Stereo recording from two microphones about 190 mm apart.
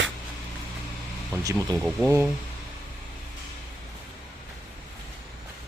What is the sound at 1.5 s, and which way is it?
Speech, 5° right (ahead or behind).